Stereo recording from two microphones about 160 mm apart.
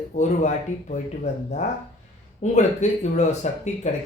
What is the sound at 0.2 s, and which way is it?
Speech, 50° left (ahead or behind).